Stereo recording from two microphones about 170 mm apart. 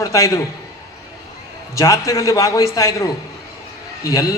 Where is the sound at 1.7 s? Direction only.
20° left (ahead or behind).